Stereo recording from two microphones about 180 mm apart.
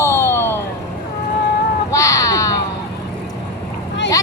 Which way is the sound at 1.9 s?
20° left (ahead or behind).